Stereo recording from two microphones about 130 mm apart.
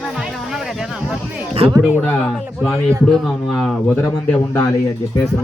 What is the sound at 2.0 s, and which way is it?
A man's voice, 10° left (ahead or behind).